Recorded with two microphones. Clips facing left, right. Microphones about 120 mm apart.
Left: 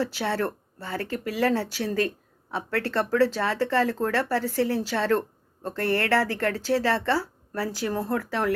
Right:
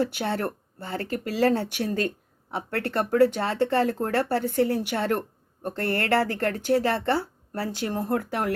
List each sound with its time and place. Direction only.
0.0 s speech: 20° right (ahead or behind)